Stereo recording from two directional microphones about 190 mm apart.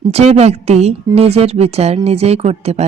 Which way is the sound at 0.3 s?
35° right (ahead or behind).